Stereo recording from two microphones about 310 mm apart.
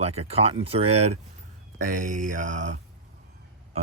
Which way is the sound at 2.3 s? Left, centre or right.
Right.